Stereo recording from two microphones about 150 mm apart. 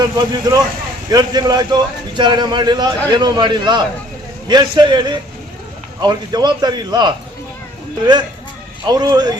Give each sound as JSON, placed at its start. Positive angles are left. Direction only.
{"t": 0.0, "sound": "a man's voice", "side_deg": -25}
{"t": 8.9, "sound": "a man's voice", "side_deg": -25}